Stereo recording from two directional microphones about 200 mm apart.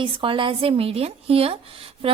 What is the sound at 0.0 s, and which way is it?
A woman's voice, 25° right (ahead or behind).